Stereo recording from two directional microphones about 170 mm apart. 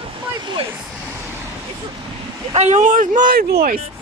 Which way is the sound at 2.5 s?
45° right (ahead or behind).